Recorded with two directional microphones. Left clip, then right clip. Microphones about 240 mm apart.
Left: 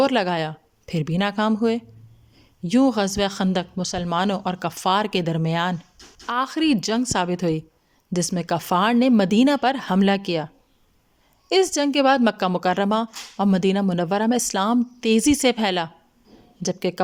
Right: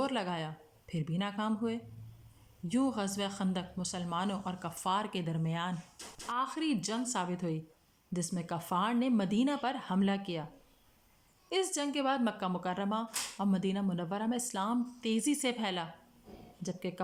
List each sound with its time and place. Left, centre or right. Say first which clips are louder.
0.0 s speech: left 15 dB; left